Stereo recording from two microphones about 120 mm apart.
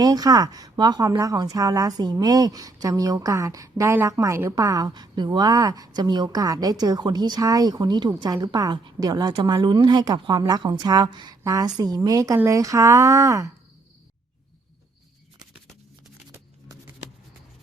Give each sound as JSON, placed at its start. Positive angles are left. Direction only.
{"t": 0.0, "sound": "a woman's voice", "side_deg": -30}
{"t": 16.3, "sound": "music", "side_deg": -25}